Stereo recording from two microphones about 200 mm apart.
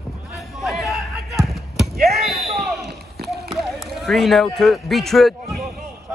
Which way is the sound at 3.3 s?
Centre (ahead or behind).